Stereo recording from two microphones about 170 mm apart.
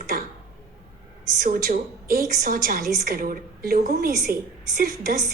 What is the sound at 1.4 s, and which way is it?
A woman's voice, 50° right (ahead or behind).